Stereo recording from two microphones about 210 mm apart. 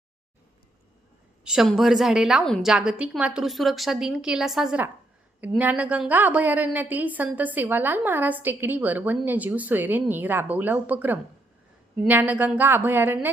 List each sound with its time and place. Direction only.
1.5 s a woman's voice: centre (ahead or behind)